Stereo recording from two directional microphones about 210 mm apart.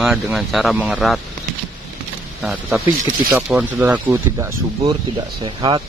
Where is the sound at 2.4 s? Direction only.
5° right (ahead or behind).